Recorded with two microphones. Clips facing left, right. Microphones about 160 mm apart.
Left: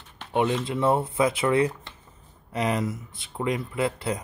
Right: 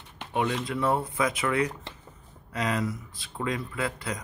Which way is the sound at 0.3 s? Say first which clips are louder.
Left 4 dB; 25° left (ahead or behind).